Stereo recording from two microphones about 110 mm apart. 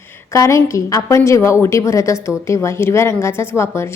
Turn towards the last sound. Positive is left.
turn(degrees=25)  # may be behind; listen again after turning